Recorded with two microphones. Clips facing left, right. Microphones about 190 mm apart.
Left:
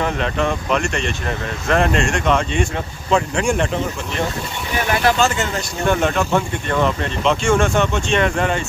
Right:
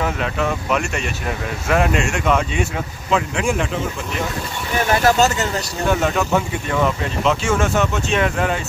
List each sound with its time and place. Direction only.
0.0 s speech: 5° right (ahead or behind)
5.0 s speech: 40° right (ahead or behind)
5.9 s speech: 5° right (ahead or behind)